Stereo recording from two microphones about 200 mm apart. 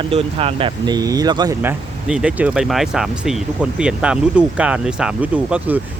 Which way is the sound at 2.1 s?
5° right (ahead or behind).